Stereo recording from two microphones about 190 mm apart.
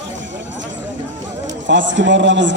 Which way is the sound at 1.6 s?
70° right (ahead or behind).